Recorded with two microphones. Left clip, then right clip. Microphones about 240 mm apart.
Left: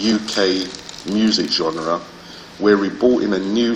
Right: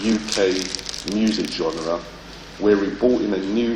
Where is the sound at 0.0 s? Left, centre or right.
Left.